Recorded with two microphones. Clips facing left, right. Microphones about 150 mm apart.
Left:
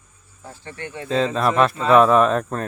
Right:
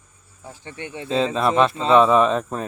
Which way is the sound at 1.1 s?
Centre (ahead or behind).